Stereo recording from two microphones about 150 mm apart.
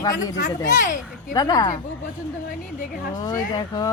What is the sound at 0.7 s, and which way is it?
Speech, 60° left (ahead or behind).